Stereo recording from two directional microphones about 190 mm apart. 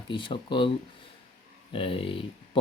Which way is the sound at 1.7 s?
30° left (ahead or behind).